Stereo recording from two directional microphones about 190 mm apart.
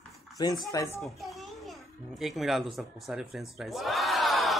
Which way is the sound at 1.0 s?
Centre (ahead or behind).